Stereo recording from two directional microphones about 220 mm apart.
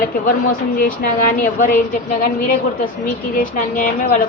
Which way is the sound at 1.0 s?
35° left (ahead or behind).